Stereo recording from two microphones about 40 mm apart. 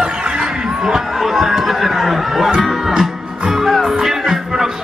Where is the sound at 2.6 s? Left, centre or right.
Centre.